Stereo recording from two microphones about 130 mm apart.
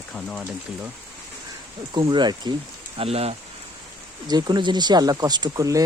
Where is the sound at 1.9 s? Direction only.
35° right (ahead or behind).